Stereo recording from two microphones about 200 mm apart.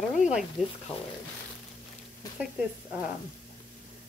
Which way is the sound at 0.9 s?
30° left (ahead or behind).